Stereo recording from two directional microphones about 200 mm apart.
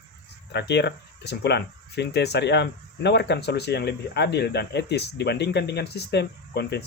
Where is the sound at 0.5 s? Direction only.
55° left (ahead or behind).